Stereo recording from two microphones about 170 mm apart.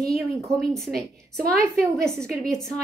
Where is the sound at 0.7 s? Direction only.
Centre (ahead or behind).